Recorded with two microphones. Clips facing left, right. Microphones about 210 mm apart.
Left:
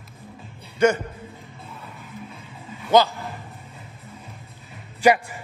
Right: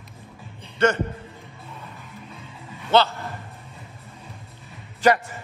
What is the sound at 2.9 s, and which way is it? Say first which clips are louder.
Speech: left 2 dB; 10° left (ahead or behind).